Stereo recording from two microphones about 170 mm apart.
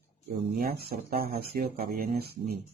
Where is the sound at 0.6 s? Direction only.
65° right (ahead or behind).